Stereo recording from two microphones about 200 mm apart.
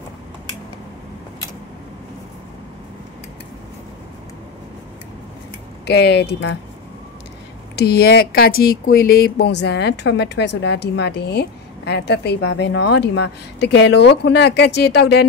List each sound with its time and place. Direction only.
5.9 s speech: 55° left (ahead or behind)
7.7 s speech: 50° left (ahead or behind)